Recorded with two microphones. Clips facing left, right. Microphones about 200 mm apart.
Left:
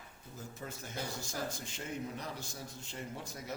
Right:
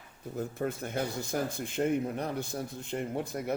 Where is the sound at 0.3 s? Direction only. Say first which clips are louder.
Right 13 dB; 60° right (ahead or behind).